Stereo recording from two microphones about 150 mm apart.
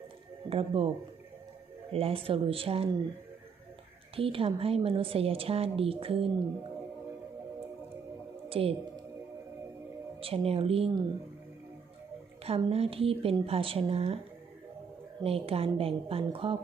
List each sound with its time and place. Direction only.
0.5 s a woman's voice: 40° right (ahead or behind)
1.9 s a woman's voice: 40° right (ahead or behind)
4.1 s a woman's voice: 40° right (ahead or behind)
8.4 s speech: 40° right (ahead or behind)
10.2 s a woman's voice: 40° right (ahead or behind)
12.5 s a woman's voice: 40° right (ahead or behind)
15.2 s a woman's voice: 40° right (ahead or behind)